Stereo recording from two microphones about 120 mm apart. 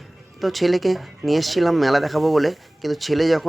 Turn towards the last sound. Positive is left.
turn(degrees=0)  # may be behind; listen again after turning